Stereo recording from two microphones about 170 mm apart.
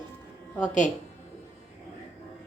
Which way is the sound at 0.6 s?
45° left (ahead or behind).